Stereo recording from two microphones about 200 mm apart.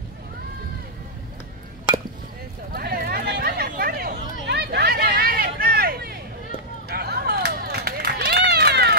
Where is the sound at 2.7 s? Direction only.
50° right (ahead or behind).